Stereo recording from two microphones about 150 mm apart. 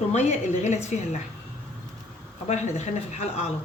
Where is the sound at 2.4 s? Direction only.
50° left (ahead or behind).